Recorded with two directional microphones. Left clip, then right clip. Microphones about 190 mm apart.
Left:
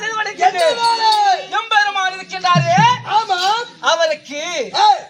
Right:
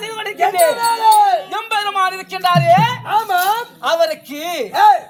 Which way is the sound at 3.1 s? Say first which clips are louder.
Even; 15° left (ahead or behind).